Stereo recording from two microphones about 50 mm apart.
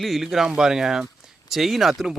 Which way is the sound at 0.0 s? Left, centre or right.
Centre.